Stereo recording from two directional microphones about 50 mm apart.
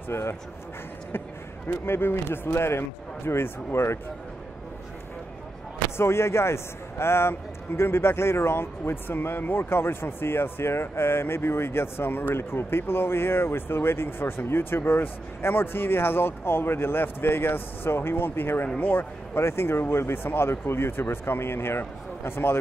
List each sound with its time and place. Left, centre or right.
0.1 s a man's voice: left
1.7 s a man's voice: left
5.9 s a man's voice: left
9.6 s speech: left
18.8 s speech: left
19.3 s speech: left